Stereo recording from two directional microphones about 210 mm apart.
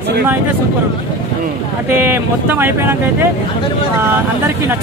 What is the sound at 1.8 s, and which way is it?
Speech, 10° right (ahead or behind).